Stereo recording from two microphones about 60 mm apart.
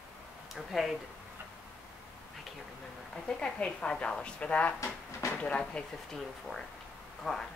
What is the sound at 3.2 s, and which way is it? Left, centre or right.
A woman's voice, centre.